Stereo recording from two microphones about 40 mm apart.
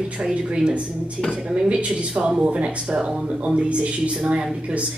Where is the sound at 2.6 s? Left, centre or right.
Right.